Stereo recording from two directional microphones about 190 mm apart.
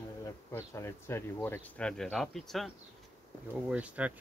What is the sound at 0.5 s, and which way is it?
Speech, 15° left (ahead or behind).